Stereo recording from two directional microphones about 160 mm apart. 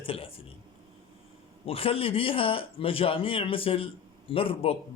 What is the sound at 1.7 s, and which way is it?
Speech, 35° left (ahead or behind).